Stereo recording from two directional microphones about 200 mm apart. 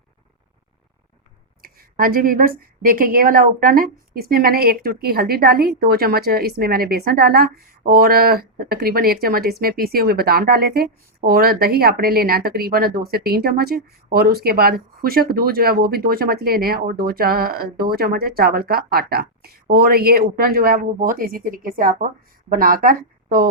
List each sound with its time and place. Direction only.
1.6 s a woman's voice: 45° right (ahead or behind)